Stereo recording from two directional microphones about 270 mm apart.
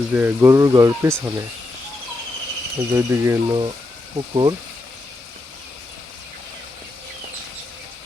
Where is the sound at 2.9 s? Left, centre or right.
Centre.